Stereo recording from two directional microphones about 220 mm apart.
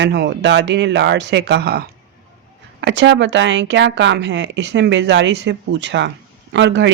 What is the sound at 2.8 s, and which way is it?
Speech, 55° right (ahead or behind).